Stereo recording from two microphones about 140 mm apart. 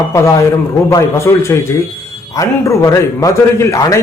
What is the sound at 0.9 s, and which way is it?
A man's voice, 20° left (ahead or behind).